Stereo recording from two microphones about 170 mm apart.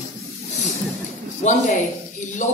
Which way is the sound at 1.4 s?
45° left (ahead or behind).